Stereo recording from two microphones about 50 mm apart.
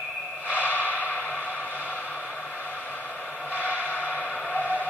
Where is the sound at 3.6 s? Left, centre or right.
Left.